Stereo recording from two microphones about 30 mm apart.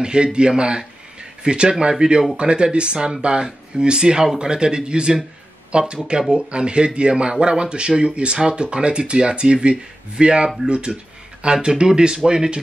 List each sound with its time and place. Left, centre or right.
0.0 s speech: right
11.5 s speech: right